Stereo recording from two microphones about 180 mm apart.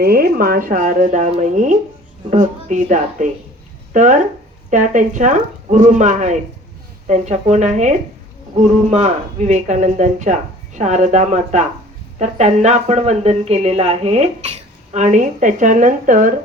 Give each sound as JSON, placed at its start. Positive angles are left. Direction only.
{"t": 0.0, "sound": "speech", "side_deg": -60}